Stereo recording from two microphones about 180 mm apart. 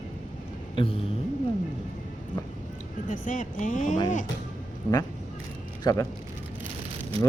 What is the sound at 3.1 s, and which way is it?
Speech, 45° left (ahead or behind).